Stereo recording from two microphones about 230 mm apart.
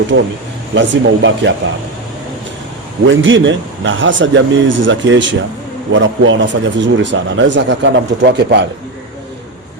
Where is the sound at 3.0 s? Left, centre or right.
Right.